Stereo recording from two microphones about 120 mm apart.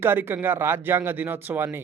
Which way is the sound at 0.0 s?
20° right (ahead or behind).